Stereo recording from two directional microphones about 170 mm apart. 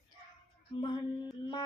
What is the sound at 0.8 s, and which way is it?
Speech, 25° left (ahead or behind).